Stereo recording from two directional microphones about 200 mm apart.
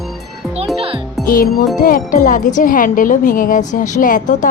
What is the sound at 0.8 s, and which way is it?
Music, 25° right (ahead or behind).